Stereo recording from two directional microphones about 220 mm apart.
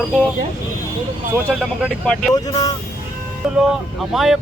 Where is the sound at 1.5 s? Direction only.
Centre (ahead or behind).